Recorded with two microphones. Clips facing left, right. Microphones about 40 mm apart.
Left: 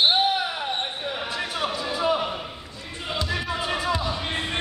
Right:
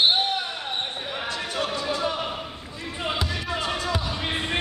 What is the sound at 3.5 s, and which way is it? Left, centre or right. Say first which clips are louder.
Basketball bounce: left 1 dB; centre.